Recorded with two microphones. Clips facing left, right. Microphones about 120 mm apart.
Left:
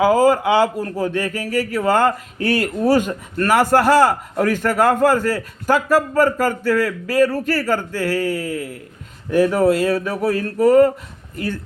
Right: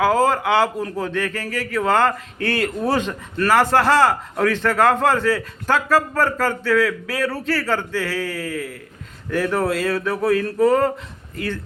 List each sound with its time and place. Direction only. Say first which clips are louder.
0.0 s a man's voice: left 3 dB; 10° left (ahead or behind)